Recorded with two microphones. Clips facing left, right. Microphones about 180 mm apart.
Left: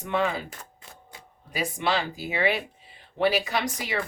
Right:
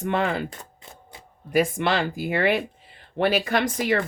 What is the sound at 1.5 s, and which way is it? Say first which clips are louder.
Speech: right 6 dB; 55° right (ahead or behind).